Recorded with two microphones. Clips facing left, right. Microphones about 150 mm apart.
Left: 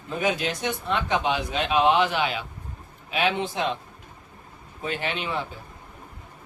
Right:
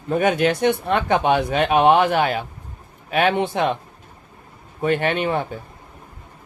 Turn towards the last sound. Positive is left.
turn(degrees=-55)  # may be behind; listen again after turning